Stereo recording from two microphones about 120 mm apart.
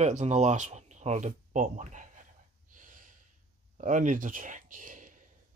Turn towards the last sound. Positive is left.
turn(degrees=-90)